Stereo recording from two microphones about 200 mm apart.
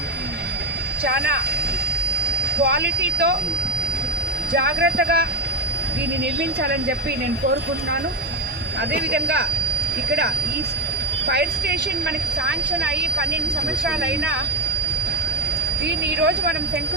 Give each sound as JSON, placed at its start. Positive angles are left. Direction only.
{"t": 1.0, "sound": "speech", "side_deg": -55}
{"t": 2.6, "sound": "speech", "side_deg": -55}
{"t": 4.5, "sound": "speech", "side_deg": -55}
{"t": 6.4, "sound": "speech", "side_deg": -55}
{"t": 8.9, "sound": "speech", "side_deg": -55}
{"t": 11.3, "sound": "speech", "side_deg": -55}
{"t": 15.9, "sound": "speech", "side_deg": -55}